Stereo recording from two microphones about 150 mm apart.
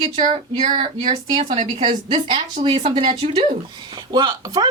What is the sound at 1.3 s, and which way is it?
Speech, 35° right (ahead or behind).